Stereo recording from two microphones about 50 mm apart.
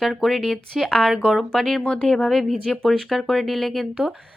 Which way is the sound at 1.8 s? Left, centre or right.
Centre.